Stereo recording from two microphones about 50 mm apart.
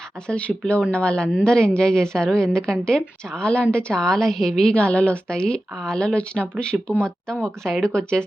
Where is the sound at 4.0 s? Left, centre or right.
Centre.